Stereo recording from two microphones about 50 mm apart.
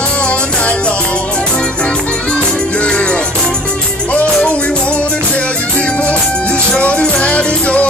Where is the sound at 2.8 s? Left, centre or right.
Left.